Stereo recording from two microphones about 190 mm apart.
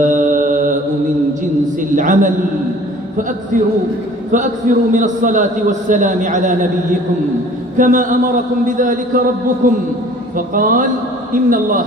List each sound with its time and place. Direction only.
0.0 s mantra: 40° right (ahead or behind)
1.4 s a sound: 45° right (ahead or behind)
4.3 s a man's voice: 40° right (ahead or behind)